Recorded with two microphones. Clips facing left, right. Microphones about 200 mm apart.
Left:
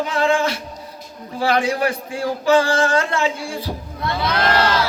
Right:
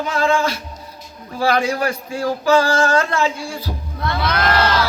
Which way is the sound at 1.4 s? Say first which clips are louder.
Even; 30° left (ahead or behind).